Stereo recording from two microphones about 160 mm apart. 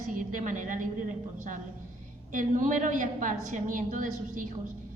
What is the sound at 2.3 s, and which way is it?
A woman's voice, 55° right (ahead or behind).